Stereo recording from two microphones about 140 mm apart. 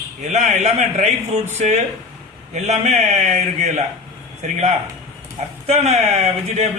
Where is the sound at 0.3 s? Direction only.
55° right (ahead or behind).